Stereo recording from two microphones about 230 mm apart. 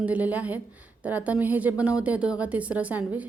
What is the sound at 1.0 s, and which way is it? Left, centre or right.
A woman's voice, centre.